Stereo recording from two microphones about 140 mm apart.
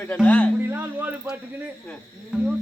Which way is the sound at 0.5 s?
15° right (ahead or behind).